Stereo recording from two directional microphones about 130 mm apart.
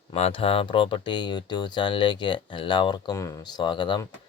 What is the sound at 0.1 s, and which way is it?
Speech, 50° left (ahead or behind).